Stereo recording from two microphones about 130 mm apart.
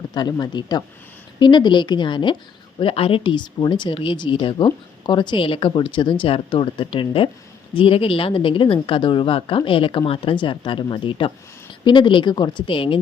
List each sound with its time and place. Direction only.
0.1 s speech: 30° left (ahead or behind)